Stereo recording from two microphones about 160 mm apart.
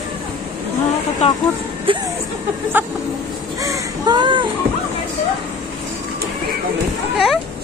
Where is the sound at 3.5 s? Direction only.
20° right (ahead or behind).